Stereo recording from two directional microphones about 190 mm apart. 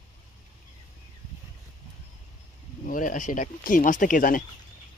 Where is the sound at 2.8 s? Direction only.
45° left (ahead or behind).